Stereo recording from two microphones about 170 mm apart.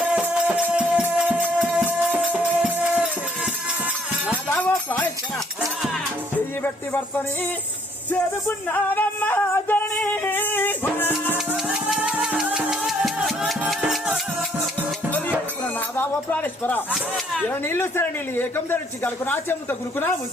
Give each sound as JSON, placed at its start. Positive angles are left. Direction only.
{"t": 0.0, "sound": "music", "side_deg": -5}
{"t": 4.4, "sound": "jingle bell", "side_deg": 10}
{"t": 8.1, "sound": "music", "side_deg": 10}
{"t": 11.3, "sound": "music", "side_deg": 0}
{"t": 16.0, "sound": "a man's voice", "side_deg": 10}
{"t": 17.5, "sound": "a man's voice", "side_deg": 15}